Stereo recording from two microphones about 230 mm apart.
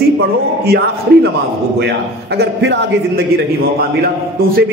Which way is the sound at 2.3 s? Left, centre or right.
Right.